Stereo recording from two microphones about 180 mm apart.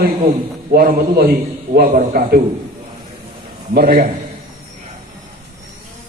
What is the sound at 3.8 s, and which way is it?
Speech, 55° right (ahead or behind).